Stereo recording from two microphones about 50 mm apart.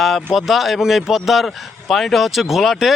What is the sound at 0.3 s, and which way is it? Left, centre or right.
Speech, centre.